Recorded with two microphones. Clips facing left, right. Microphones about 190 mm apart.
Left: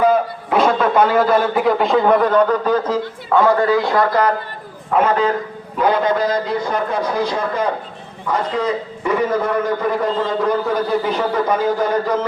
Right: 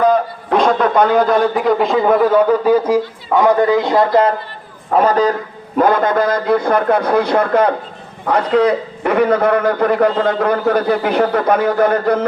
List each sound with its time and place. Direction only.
0.0 s a man's voice: 5° left (ahead or behind); by 4.4 s 25° right (ahead or behind)
4.9 s a man's voice: 40° right (ahead or behind)
5.7 s a man's voice: 50° right (ahead or behind)